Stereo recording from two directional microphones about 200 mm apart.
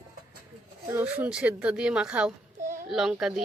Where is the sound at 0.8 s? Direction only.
10° right (ahead or behind).